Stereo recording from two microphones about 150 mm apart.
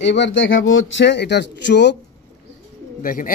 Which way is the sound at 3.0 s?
70° left (ahead or behind).